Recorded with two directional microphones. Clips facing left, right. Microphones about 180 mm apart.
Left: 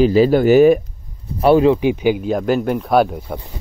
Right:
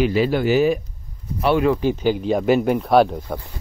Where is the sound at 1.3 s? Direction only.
35° left (ahead or behind).